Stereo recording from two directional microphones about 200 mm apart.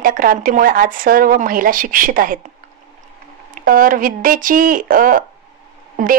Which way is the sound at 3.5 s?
45° right (ahead or behind).